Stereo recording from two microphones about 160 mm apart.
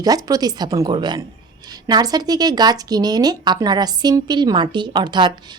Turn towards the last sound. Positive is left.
turn(degrees=-30)  # may be behind; listen again after turning